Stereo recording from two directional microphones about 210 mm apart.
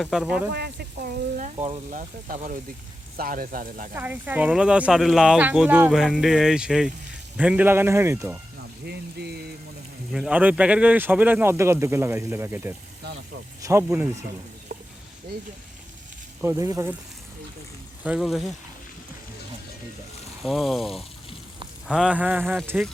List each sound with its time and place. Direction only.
0.0 s speech: 5° right (ahead or behind)
0.5 s speech: 50° right (ahead or behind)
1.5 s speech: 30° right (ahead or behind)
3.9 s speech: 10° right (ahead or behind)
8.8 s speech: 50° right (ahead or behind)
10.1 s speech: 5° right (ahead or behind)
16.4 s speech: 15° right (ahead or behind)
18.0 s speech: 5° right (ahead or behind)
20.4 s speech: centre (ahead or behind)